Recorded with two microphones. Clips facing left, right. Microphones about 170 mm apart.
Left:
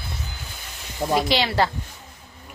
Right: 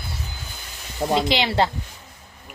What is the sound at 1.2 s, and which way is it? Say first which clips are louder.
Speech: even; 20° right (ahead or behind).